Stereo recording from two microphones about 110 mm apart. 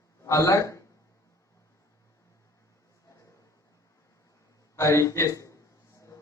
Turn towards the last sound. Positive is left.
turn(degrees=30)  # may be behind; listen again after turning